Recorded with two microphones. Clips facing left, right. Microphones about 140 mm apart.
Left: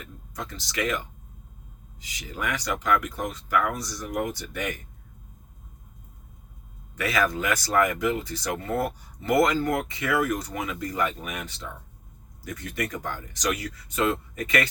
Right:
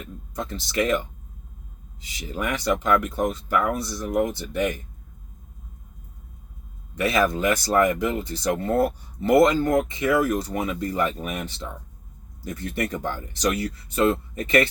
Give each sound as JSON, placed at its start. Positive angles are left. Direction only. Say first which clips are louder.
{"t": 0.0, "sound": "speech", "louder": "right 5 dB", "side_deg": -25}
{"t": 2.1, "sound": "speech", "louder": "right 3 dB", "side_deg": -30}
{"t": 7.0, "sound": "speech", "louder": "right 4 dB", "side_deg": -25}